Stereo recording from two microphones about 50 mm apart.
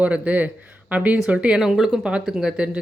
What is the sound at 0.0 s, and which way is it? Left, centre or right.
A woman's voice, right.